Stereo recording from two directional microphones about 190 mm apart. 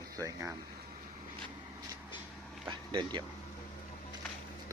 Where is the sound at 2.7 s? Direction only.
25° right (ahead or behind).